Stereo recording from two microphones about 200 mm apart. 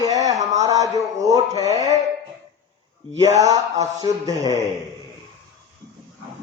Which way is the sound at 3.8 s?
15° right (ahead or behind).